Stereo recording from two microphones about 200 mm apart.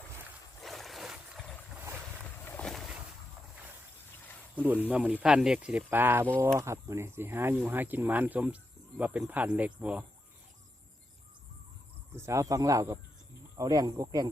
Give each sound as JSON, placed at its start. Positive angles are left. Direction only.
{"t": 0.6, "sound": "boat", "side_deg": 0}
{"t": 4.5, "sound": "speech", "side_deg": -10}
{"t": 12.1, "sound": "speech", "side_deg": -15}